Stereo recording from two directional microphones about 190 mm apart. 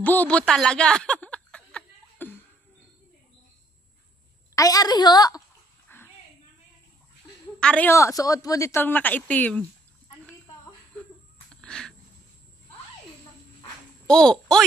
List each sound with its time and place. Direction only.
0.0 s chuckle: 10° left (ahead or behind)
4.6 s a woman's voice: 20° left (ahead or behind)
5.9 s dog: 10° left (ahead or behind)
7.6 s a woman's voice: 10° left (ahead or behind)
11.6 s a sound: 5° left (ahead or behind)
14.0 s a child's voice: 5° left (ahead or behind)